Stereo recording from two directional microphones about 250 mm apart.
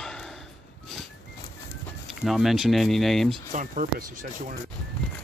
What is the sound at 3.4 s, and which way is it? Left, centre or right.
Speech, right.